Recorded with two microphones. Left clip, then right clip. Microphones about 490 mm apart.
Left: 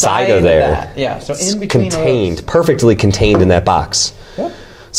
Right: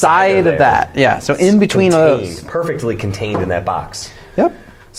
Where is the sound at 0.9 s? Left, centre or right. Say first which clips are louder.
Right 5 dB; right.